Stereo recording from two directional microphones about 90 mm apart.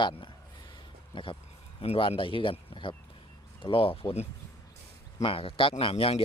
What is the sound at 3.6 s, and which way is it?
Speech, 90° left.